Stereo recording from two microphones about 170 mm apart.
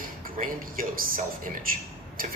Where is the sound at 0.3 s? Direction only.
55° right (ahead or behind).